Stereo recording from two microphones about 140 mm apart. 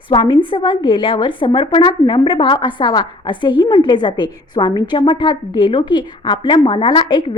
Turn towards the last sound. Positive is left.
turn(degrees=35)  # may be behind; listen again after turning